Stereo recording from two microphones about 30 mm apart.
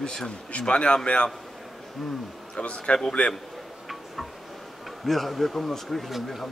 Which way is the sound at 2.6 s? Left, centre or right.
Left.